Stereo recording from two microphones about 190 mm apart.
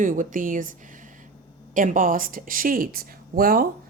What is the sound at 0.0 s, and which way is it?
A woman's voice, 45° right (ahead or behind).